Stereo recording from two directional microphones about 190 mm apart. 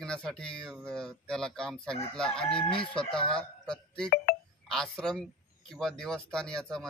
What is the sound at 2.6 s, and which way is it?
Chicken, 25° left (ahead or behind).